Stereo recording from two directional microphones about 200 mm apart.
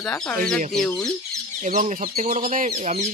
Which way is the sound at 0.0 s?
5° left (ahead or behind).